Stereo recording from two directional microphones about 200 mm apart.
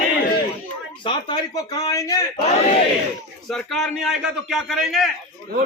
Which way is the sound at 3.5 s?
Centre (ahead or behind).